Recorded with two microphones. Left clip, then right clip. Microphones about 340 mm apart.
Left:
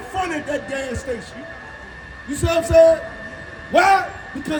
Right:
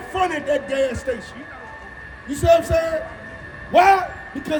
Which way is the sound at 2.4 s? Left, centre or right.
Centre.